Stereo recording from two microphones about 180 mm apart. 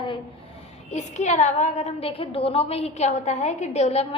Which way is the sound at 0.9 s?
40° left (ahead or behind).